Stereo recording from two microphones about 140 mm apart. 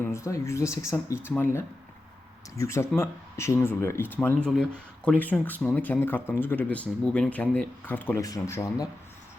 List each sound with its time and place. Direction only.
0.0 s speech: 20° left (ahead or behind)